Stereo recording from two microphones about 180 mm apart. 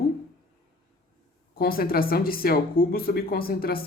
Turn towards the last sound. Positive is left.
turn(degrees=55)  # may be behind; listen again after turning